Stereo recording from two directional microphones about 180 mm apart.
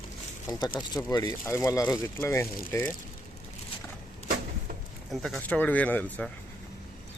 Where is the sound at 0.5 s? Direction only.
20° left (ahead or behind).